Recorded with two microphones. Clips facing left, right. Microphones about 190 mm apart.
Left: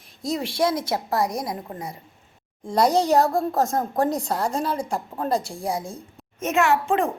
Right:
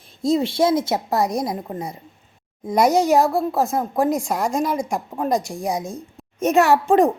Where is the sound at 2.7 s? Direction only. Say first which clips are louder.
Right 3 dB; 10° right (ahead or behind).